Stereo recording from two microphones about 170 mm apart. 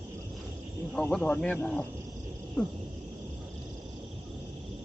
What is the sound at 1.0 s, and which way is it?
Speech, 5° left (ahead or behind).